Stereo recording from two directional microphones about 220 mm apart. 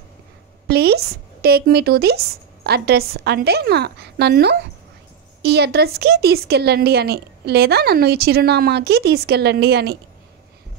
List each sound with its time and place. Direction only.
0.7 s speech: 50° right (ahead or behind)